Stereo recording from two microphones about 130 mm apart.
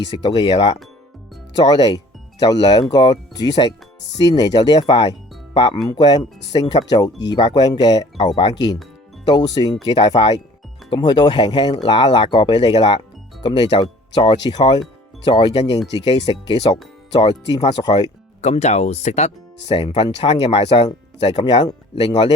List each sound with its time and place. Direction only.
0.2 s speech: 35° left (ahead or behind)
18.4 s speech: 60° left (ahead or behind)
20.0 s speech: 40° left (ahead or behind)